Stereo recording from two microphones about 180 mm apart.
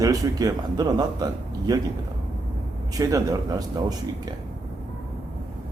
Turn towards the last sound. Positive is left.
turn(degrees=-20)  # may be behind; listen again after turning